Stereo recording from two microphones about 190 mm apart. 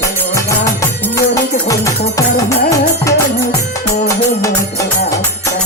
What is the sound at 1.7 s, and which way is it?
Music, 15° left (ahead or behind).